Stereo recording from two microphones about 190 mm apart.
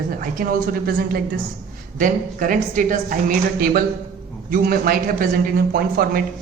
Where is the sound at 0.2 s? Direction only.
45° right (ahead or behind).